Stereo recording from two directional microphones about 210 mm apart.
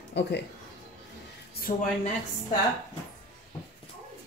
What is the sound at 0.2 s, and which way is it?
Speech, 55° left (ahead or behind).